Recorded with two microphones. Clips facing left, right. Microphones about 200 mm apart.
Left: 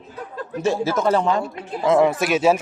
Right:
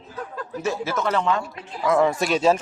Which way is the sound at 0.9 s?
35° left (ahead or behind).